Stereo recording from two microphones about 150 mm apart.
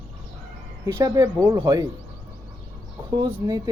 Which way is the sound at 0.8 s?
20° right (ahead or behind).